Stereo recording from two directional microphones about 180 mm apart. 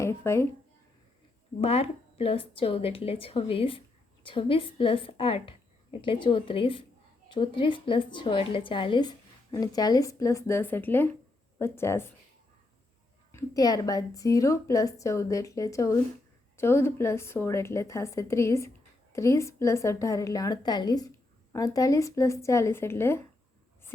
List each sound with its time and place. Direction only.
0.0 s speech: 15° left (ahead or behind)
1.6 s a woman's voice: 35° left (ahead or behind); by 12.1 s 15° left (ahead or behind)
13.3 s a woman's voice: 20° left (ahead or behind)